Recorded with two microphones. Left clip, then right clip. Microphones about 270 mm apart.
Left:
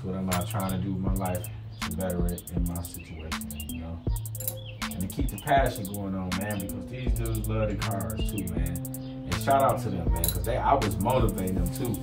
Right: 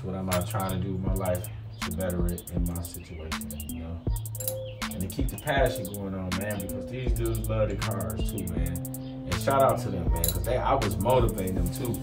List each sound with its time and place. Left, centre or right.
0.3 s speech: centre
4.7 s speech: centre